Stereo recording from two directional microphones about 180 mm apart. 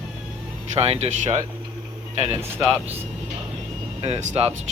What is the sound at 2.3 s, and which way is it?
Speech, 15° right (ahead or behind).